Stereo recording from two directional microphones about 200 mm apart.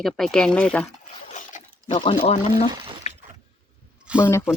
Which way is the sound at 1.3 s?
40° left (ahead or behind).